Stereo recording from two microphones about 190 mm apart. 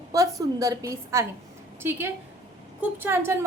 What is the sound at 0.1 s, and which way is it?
A woman's voice, 20° right (ahead or behind).